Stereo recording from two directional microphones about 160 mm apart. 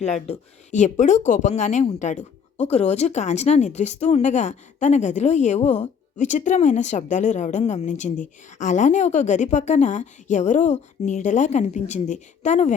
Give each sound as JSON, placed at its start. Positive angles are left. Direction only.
{"t": 0.0, "sound": "speech", "side_deg": 45}